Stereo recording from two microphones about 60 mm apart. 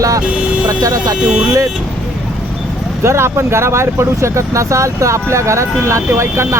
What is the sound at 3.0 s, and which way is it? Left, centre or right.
Speech, right.